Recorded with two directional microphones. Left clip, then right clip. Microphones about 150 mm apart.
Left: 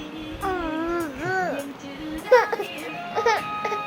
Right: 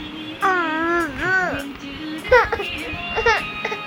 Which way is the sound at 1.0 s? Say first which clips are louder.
Right 6 dB; 5° right (ahead or behind).